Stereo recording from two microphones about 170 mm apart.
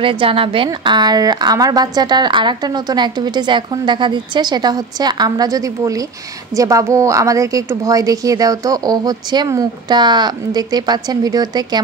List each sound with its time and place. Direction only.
0.0 s a woman's voice: 30° right (ahead or behind)